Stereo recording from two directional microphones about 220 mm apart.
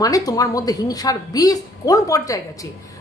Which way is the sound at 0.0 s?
15° left (ahead or behind).